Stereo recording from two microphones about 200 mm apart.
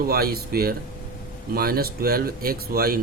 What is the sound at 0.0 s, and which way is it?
A man's voice, 50° right (ahead or behind).